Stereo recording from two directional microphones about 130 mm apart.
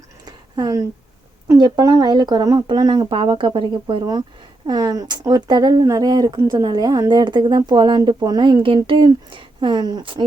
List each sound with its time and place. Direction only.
0.3 s a sound: 30° right (ahead or behind)
1.5 s speech: 30° right (ahead or behind)
4.6 s speech: 30° right (ahead or behind)